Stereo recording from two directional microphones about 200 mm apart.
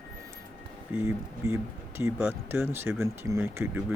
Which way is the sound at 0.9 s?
10° right (ahead or behind).